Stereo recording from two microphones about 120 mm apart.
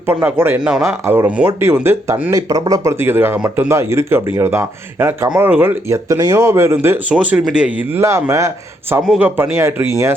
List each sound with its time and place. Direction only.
0.0 s speech: 15° right (ahead or behind)
0.9 s speech: 20° right (ahead or behind)
2.3 s speech: 30° right (ahead or behind)
7.1 s speech: 10° right (ahead or behind)
9.0 s speech: 10° right (ahead or behind)